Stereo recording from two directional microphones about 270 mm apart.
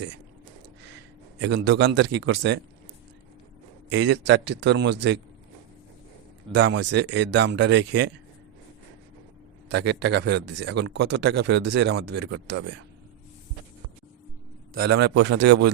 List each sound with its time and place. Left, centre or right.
1.4 s speech: right
3.8 s speech: right
6.5 s speech: right
9.6 s speech: right
14.7 s speech: right